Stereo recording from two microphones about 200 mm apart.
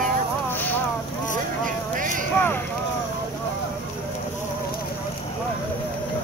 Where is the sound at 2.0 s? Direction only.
40° right (ahead or behind).